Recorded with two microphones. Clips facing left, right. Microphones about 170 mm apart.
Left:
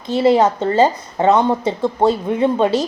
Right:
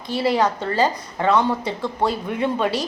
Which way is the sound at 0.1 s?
20° left (ahead or behind).